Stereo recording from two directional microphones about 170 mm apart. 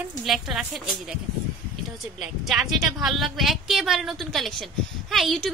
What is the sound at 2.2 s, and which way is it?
A woman's voice, centre (ahead or behind).